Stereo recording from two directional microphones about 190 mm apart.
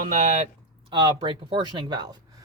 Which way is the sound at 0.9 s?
25° right (ahead or behind).